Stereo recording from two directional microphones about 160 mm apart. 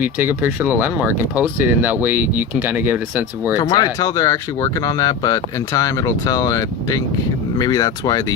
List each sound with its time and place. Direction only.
0.0 s speech: 10° right (ahead or behind)
3.6 s speech: 25° left (ahead or behind)